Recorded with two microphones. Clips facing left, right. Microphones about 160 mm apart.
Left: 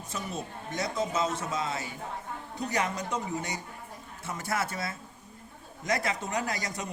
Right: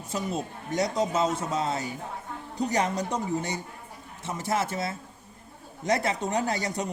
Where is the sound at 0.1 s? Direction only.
35° right (ahead or behind).